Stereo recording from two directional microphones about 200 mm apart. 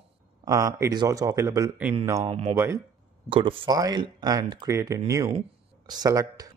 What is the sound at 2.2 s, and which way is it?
Speech, 30° right (ahead or behind).